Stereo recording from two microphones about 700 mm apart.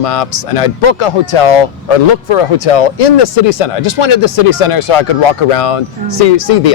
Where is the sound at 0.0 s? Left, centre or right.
Left.